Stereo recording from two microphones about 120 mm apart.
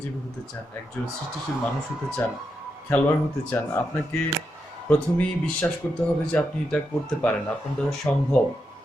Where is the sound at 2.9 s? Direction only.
15° left (ahead or behind).